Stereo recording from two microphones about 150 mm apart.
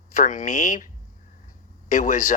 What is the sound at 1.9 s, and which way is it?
Speech, 55° left (ahead or behind).